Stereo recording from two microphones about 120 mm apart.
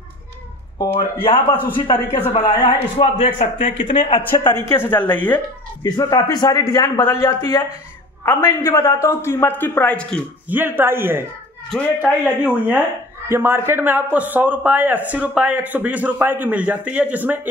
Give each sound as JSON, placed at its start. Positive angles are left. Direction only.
{"t": 0.9, "sound": "a man's voice", "side_deg": 50}
{"t": 4.4, "sound": "a man's voice", "side_deg": 35}
{"t": 4.6, "sound": "speech", "side_deg": 20}
{"t": 5.9, "sound": "a man's voice", "side_deg": 35}
{"t": 10.5, "sound": "speech", "side_deg": -15}